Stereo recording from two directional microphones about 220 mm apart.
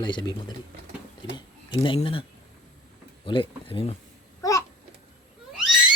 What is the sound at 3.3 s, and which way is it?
Speech, 25° left (ahead or behind).